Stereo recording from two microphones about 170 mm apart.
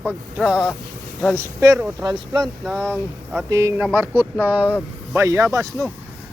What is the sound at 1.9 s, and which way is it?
Speech, 25° right (ahead or behind).